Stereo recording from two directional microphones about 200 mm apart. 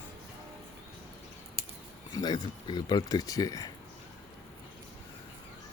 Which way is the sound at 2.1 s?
20° left (ahead or behind).